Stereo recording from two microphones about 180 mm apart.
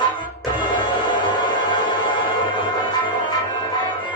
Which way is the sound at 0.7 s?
25° left (ahead or behind).